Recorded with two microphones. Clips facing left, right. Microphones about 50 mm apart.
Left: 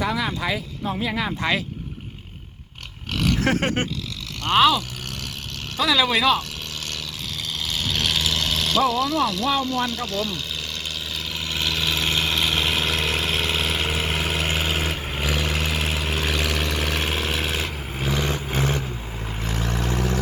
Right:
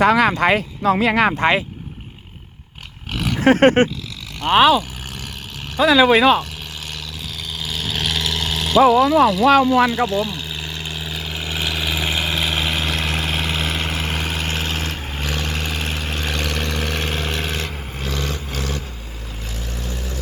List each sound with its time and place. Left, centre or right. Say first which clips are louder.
0.0 s speech: right 10 dB; right
0.8 s speech: right 11 dB; right
1.4 s speech: right 6 dB; right
3.2 s pig: left 1 dB; centre
3.4 s speech: right 14 dB; right
4.4 s speech: right 4 dB; centre
6.1 s speech: right 6 dB; centre
7.6 s vehicle: right 1 dB; centre; by 18.9 s left
19.4 s vehicle: left 6 dB; left